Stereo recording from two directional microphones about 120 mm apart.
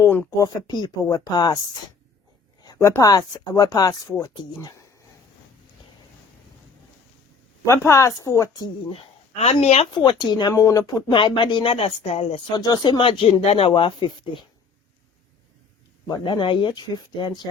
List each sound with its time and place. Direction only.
0.3 s speech: 30° left (ahead or behind)
2.8 s speech: 25° left (ahead or behind)
7.7 s a woman's voice: 25° left (ahead or behind)
8.9 s speech: 60° left (ahead or behind)
9.9 s a woman's voice: 40° left (ahead or behind)
11.1 s speech: 45° left (ahead or behind)
12.5 s speech: 35° left (ahead or behind)
16.0 s speech: 40° left (ahead or behind)